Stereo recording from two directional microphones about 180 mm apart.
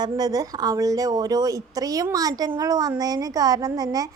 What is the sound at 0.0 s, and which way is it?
A woman's voice, 20° right (ahead or behind).